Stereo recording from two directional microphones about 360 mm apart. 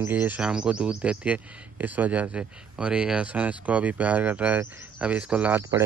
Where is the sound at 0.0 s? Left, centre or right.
Centre.